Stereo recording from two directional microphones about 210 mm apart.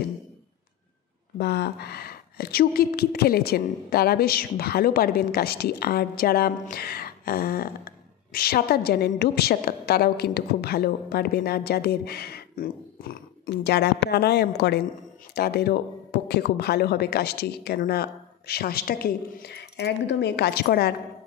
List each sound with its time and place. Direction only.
1.4 s a woman's voice: 50° left (ahead or behind)